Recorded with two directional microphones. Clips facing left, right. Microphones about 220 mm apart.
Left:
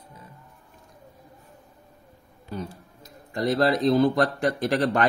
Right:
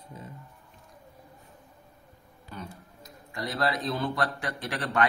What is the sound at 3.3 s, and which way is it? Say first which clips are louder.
A man's voice: left 8 dB; 35° left (ahead or behind).